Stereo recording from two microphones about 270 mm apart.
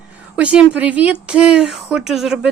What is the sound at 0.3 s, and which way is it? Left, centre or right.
Speech, centre.